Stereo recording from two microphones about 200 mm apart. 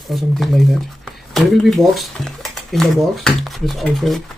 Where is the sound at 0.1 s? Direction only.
Centre (ahead or behind).